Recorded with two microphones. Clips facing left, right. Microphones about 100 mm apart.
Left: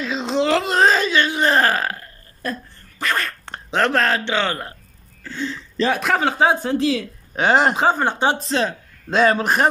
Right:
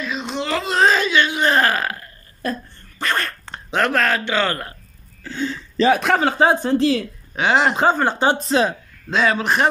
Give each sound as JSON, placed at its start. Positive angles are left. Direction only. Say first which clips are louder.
{"t": 0.0, "sound": "wail", "louder": "left 5 dB", "side_deg": 90}
{"t": 0.7, "sound": "burping", "louder": "even", "side_deg": 40}
{"t": 3.0, "sound": "dog", "louder": "even", "side_deg": 0}
{"t": 3.7, "sound": "a man's voice", "louder": "even", "side_deg": 30}
{"t": 5.2, "sound": "speech", "louder": "right 2 dB", "side_deg": -5}
{"t": 7.3, "sound": "speech", "louder": "left 1 dB", "side_deg": 40}
{"t": 7.7, "sound": "speech", "louder": "right 1 dB", "side_deg": 5}
{"t": 9.1, "sound": "speech", "louder": "left 2 dB", "side_deg": 45}